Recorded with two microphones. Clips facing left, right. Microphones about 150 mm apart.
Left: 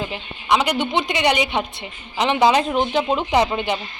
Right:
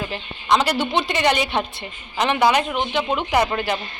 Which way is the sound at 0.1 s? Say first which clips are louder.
Right 3 dB; 15° left (ahead or behind).